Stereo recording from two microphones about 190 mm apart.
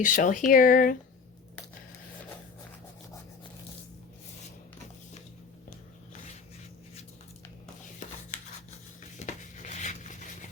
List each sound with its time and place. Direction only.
0.0 s speech: 45° left (ahead or behind)
9.1 s rub: 40° left (ahead or behind)